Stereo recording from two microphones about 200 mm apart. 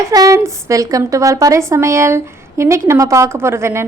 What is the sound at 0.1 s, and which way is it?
A woman's voice, 15° right (ahead or behind).